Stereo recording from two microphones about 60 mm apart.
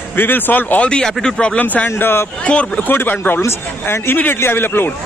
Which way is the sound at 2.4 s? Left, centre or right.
Left.